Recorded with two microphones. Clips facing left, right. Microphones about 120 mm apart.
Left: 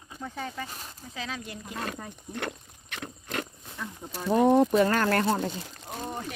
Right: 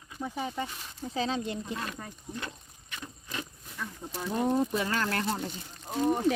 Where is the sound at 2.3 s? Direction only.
65° left (ahead or behind).